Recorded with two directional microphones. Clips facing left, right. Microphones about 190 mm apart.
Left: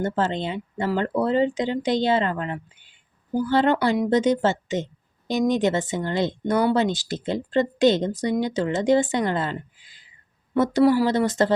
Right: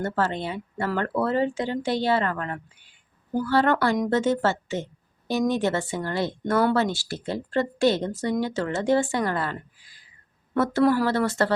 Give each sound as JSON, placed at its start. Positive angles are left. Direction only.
{"t": 0.0, "sound": "speech", "side_deg": 20}